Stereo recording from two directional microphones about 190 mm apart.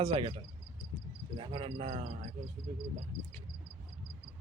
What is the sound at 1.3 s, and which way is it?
Speech, 30° right (ahead or behind).